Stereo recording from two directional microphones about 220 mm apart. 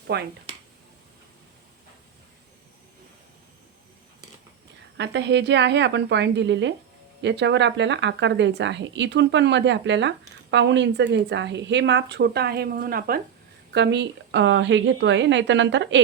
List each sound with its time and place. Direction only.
0.1 s speech: 50° right (ahead or behind)
4.9 s a woman's voice: 55° right (ahead or behind)